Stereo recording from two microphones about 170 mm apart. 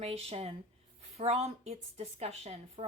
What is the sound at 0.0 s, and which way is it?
A woman's voice, 35° right (ahead or behind).